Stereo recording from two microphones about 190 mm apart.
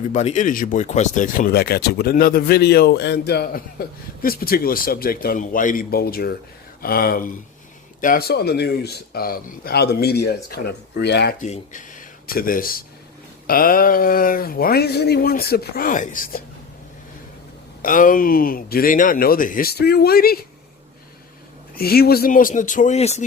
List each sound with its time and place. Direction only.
0.1 s speech: 40° left (ahead or behind); by 11.3 s 60° left (ahead or behind)
11.3 s speech: 40° left (ahead or behind)
17.8 s speech: 45° left (ahead or behind)
21.8 s speech: 55° left (ahead or behind); by 23.2 s 35° left (ahead or behind)